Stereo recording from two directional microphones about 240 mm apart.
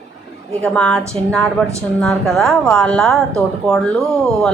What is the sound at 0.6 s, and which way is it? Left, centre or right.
Speech, centre.